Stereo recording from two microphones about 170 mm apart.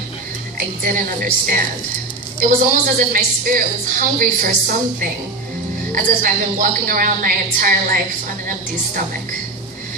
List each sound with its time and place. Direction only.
0.9 s a woman's voice: 55° right (ahead or behind)
5.9 s a woman's voice: 55° right (ahead or behind)